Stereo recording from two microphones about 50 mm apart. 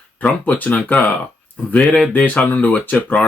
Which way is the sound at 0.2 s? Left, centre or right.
Left.